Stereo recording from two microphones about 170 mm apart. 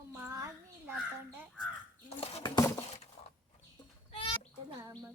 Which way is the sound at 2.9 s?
40° left (ahead or behind).